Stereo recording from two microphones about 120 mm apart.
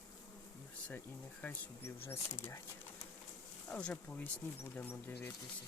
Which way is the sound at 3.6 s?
10° left (ahead or behind).